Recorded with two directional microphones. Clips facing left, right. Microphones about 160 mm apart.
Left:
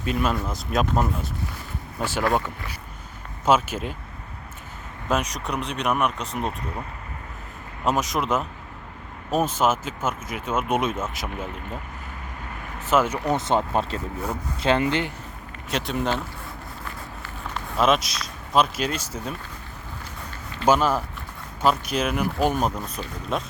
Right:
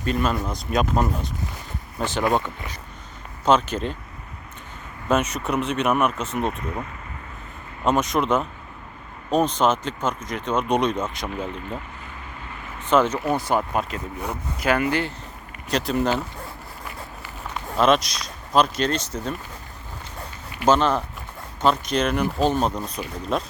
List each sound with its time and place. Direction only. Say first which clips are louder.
0.0 s speech: right 1 dB; 5° left (ahead or behind)
3.4 s speech: right 1 dB; 5° left (ahead or behind)
5.0 s speech: right 3 dB; centre (ahead or behind)
7.9 s speech: right 3 dB; centre (ahead or behind)
12.8 s speech: right 2 dB; 5° left (ahead or behind)
13.2 s speech: even; 20° left (ahead or behind)
15.7 s speech: right 4 dB; centre (ahead or behind)
17.7 s speech: right 2 dB; centre (ahead or behind)
20.7 s speech: right 1 dB; 5° left (ahead or behind)
23.0 s speech: right 2 dB; 10° right (ahead or behind)